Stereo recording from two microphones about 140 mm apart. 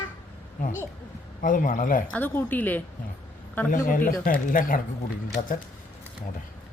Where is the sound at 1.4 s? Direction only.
70° left (ahead or behind).